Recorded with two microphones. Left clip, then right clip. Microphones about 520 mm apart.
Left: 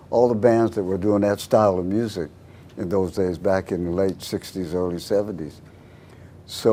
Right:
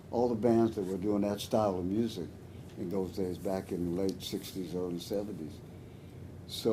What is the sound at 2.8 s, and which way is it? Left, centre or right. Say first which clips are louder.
Speech: left 13 dB; left.